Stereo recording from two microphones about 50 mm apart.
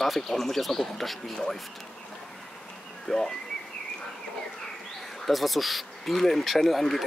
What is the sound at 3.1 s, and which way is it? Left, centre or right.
Speech, centre.